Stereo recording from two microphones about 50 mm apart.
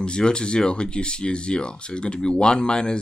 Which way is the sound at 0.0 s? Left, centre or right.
Centre.